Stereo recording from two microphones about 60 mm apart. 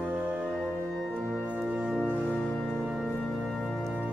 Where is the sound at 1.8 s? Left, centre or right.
Centre.